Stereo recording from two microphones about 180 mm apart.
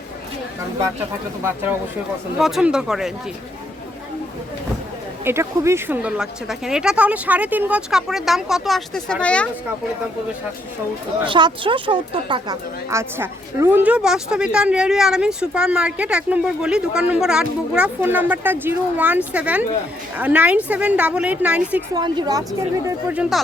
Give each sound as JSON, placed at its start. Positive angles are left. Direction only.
{"t": 1.4, "sound": "a woman's voice", "side_deg": -15}
{"t": 5.2, "sound": "speech", "side_deg": -15}
{"t": 11.3, "sound": "speech", "side_deg": -25}
{"t": 12.9, "sound": "a woman's voice", "side_deg": -15}
{"t": 21.9, "sound": "speech", "side_deg": -25}
{"t": 22.9, "sound": "a woman's voice", "side_deg": -10}